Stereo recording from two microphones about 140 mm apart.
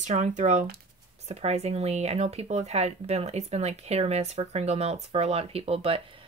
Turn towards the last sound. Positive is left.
turn(degrees=-40)  # may be behind; listen again after turning